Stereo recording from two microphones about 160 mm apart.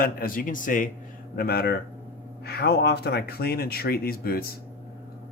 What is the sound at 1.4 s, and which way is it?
Speech, 75° left (ahead or behind).